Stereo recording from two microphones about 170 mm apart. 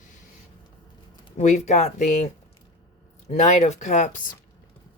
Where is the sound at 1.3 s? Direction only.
45° left (ahead or behind).